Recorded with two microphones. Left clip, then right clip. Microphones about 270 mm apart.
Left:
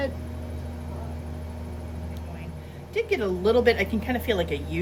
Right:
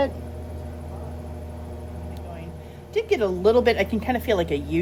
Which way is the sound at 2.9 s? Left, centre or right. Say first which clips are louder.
Right 3 dB; centre.